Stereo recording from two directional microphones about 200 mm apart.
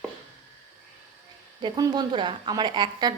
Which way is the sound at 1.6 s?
20° right (ahead or behind).